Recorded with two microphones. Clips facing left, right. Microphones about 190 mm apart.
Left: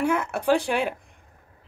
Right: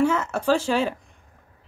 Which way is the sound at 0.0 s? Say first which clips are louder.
Right 2 dB; 15° left (ahead or behind).